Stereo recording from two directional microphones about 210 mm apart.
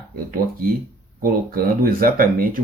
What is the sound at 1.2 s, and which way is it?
Speech, 45° right (ahead or behind).